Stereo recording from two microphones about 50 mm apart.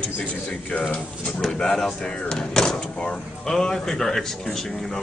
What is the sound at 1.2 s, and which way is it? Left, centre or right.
Speech, centre.